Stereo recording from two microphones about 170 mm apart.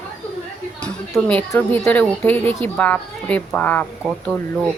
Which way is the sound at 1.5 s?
10° left (ahead or behind).